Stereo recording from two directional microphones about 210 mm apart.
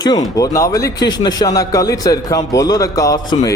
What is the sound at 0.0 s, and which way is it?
A man's voice, 20° left (ahead or behind).